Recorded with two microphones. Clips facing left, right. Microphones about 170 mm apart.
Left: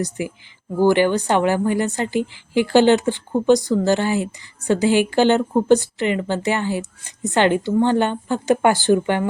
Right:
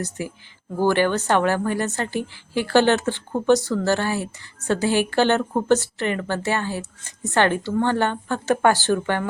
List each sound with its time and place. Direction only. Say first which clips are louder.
0.0 s a woman's voice: left 4 dB; 15° left (ahead or behind)